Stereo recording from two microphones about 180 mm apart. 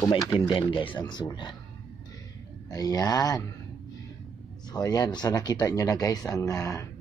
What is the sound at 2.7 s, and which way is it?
Speech, 20° left (ahead or behind).